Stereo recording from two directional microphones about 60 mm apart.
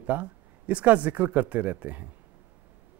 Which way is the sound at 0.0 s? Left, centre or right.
Right.